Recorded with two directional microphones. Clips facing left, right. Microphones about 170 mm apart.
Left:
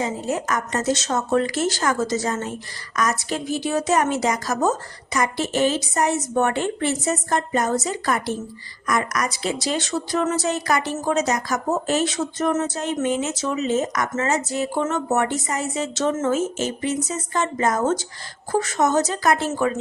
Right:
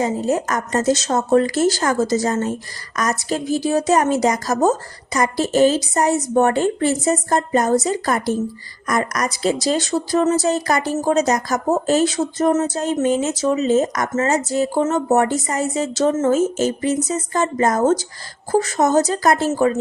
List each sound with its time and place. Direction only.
0.0 s speech: 40° right (ahead or behind)